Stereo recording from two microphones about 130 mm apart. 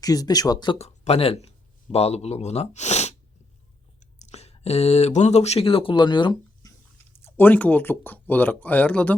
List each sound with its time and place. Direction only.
0.0 s speech: 30° left (ahead or behind)
0.8 s speech: 55° left (ahead or behind); by 6.7 s 35° left (ahead or behind)
7.2 s speech: 15° left (ahead or behind)